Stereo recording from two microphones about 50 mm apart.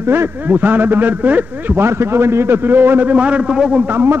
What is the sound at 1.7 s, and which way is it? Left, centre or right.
A man's voice, right.